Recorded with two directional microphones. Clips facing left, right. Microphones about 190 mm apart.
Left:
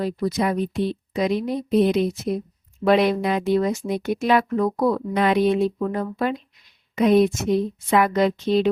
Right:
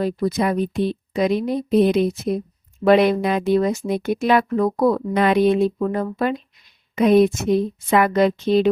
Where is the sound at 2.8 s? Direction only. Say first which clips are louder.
Right 3 dB; 55° right (ahead or behind).